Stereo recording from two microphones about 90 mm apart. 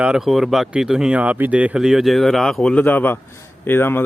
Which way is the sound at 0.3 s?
Centre (ahead or behind).